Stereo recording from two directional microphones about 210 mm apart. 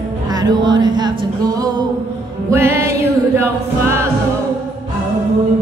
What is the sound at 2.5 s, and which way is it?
A capella, 10° right (ahead or behind).